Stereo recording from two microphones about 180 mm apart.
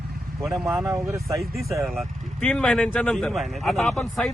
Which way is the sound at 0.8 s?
15° right (ahead or behind).